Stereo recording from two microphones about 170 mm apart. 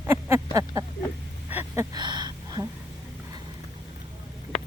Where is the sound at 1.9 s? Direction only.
25° right (ahead or behind).